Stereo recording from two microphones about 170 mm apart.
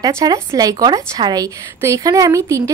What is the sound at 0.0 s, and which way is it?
A woman's voice, 20° right (ahead or behind).